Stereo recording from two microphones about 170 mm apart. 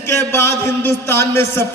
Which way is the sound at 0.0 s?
15° left (ahead or behind).